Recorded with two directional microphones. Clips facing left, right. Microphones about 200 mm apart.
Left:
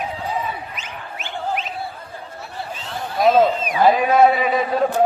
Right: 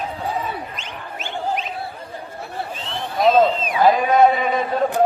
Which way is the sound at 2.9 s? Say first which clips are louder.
Even; centre (ahead or behind).